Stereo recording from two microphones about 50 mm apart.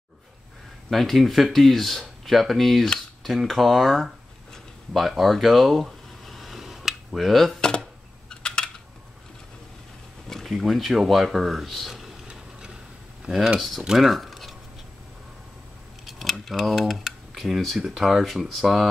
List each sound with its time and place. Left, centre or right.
0.8 s speech: centre
4.9 s a sound: centre
8.3 s a sound: centre
10.3 s speech: centre
12.3 s tick-tock: centre
13.2 s speech: centre
13.6 s speech: centre
16.1 s speech: centre